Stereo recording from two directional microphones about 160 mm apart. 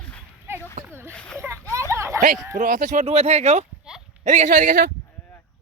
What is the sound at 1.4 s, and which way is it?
Splash, 15° right (ahead or behind).